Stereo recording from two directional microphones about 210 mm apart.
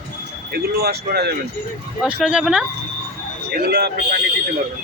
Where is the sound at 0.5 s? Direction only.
50° right (ahead or behind).